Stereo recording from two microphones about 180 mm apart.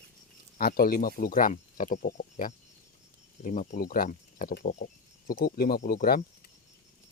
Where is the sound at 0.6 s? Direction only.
55° left (ahead or behind).